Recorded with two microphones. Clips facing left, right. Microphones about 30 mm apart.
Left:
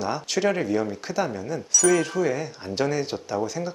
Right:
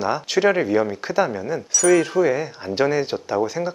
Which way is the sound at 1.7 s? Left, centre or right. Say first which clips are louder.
Right 4 dB; centre.